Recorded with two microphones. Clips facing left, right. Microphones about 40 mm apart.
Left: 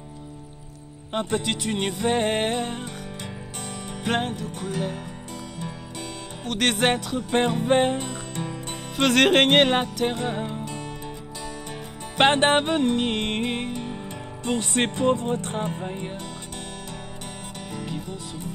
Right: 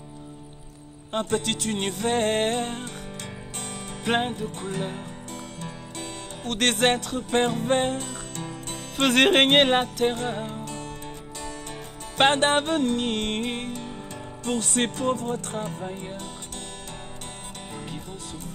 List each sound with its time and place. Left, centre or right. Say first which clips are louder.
1.3 s music: left 1 dB; centre
4.1 s music: right 1 dB; centre
6.4 s music: even; centre
7.2 s music: left 1 dB; left
9.0 s music: left 1 dB; centre
10.1 s music: left 2 dB; left
12.2 s music: left 2 dB; left